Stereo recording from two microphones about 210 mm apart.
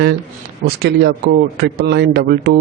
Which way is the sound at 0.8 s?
50° right (ahead or behind).